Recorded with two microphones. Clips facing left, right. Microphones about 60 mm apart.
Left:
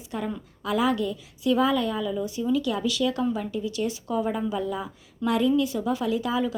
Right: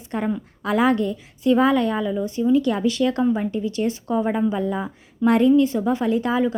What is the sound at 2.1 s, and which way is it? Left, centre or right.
A woman's voice, right.